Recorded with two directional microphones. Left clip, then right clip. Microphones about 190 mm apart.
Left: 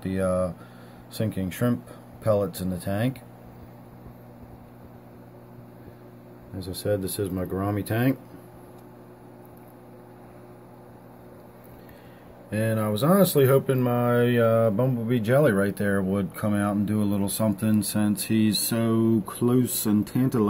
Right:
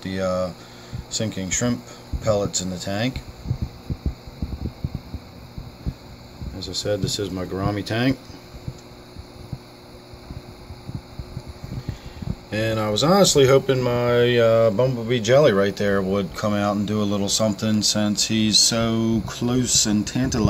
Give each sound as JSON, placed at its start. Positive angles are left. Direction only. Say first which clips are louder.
{"t": 0.0, "sound": "speech", "louder": "right 2 dB", "side_deg": 10}
{"t": 6.6, "sound": "speech", "louder": "right 3 dB", "side_deg": 5}
{"t": 12.4, "sound": "speech", "louder": "right 4 dB", "side_deg": -5}